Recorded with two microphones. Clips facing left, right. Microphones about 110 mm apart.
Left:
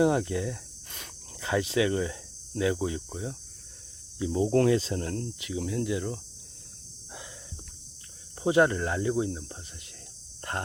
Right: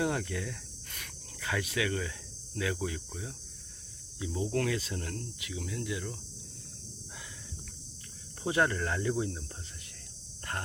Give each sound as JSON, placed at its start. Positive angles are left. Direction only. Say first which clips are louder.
{"t": 0.0, "sound": "speech", "louder": "left 8 dB", "side_deg": 25}
{"t": 8.4, "sound": "speech", "louder": "left 6 dB", "side_deg": 20}